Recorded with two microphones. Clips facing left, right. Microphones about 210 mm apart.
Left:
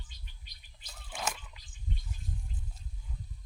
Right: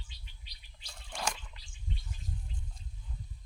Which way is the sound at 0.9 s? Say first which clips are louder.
Even; 5° left (ahead or behind).